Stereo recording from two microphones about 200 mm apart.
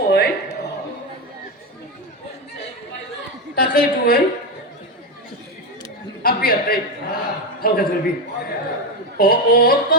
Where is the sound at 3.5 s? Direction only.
45° left (ahead or behind).